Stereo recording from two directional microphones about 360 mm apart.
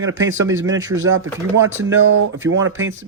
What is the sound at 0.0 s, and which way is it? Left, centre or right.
Speech, right.